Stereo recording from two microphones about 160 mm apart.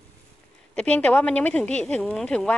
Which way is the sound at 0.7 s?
5° left (ahead or behind).